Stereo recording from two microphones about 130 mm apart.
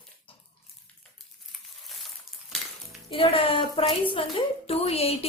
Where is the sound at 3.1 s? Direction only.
45° left (ahead or behind).